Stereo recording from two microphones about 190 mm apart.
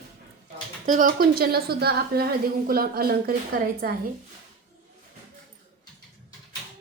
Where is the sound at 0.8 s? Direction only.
45° right (ahead or behind).